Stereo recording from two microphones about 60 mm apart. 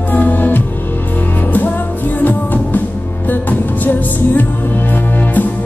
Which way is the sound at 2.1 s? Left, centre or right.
Left.